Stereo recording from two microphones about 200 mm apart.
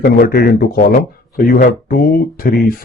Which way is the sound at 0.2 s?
50° left (ahead or behind).